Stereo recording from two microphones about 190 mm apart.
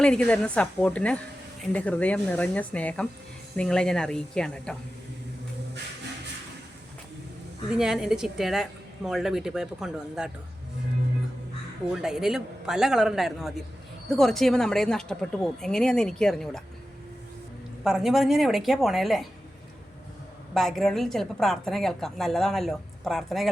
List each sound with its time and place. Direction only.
0.0 s a woman's voice: 5° left (ahead or behind)
7.7 s a woman's voice: 5° right (ahead or behind)
12.0 s a woman's voice: 5° right (ahead or behind)
17.8 s a woman's voice: centre (ahead or behind)
20.5 s a woman's voice: centre (ahead or behind)